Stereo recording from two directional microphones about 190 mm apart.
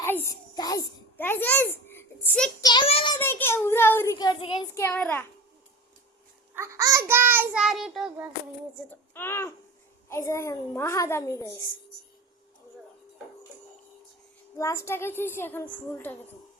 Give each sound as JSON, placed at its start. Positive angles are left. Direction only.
{"t": 0.0, "sound": "child singing", "side_deg": 10}
{"t": 0.5, "sound": "a sound", "side_deg": 20}
{"t": 2.6, "sound": "child singing", "side_deg": 25}
{"t": 3.2, "sound": "child singing", "side_deg": 10}
{"t": 6.5, "sound": "child singing", "side_deg": -15}
{"t": 8.9, "sound": "a child's voice", "side_deg": 10}
{"t": 14.5, "sound": "a child's voice", "side_deg": 15}